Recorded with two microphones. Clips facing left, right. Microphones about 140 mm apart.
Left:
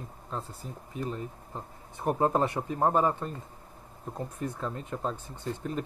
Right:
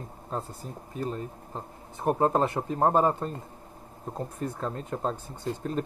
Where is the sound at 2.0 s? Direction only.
25° right (ahead or behind).